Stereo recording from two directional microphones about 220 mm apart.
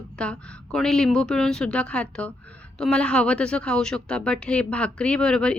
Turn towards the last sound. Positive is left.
turn(degrees=5)  # may be behind; listen again after turning